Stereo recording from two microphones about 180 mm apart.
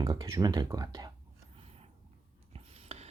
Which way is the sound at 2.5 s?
35° right (ahead or behind).